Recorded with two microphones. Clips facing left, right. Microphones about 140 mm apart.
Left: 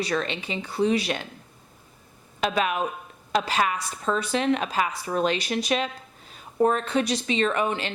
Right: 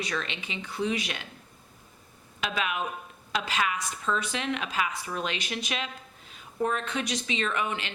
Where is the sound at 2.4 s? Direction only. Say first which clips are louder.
Left 6 dB; 40° left (ahead or behind).